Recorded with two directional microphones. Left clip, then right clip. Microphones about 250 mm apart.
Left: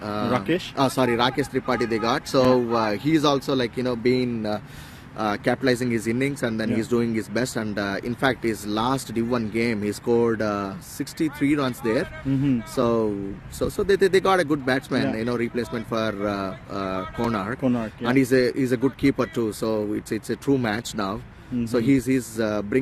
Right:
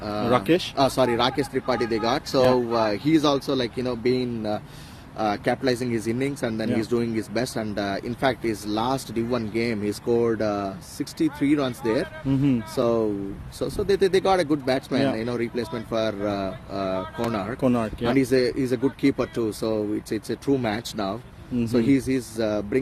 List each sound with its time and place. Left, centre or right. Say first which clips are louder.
0.0 s a sound: even; centre
0.3 s speech: right 4 dB; right
0.8 s speech: left 2 dB; centre
17.6 s speech: right 2 dB; right
18.0 s speech: left 2 dB; centre